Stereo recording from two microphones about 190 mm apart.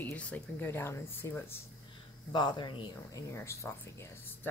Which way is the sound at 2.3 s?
25° left (ahead or behind).